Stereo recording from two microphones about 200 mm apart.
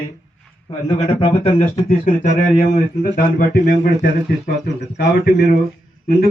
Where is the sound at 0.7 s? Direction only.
25° left (ahead or behind).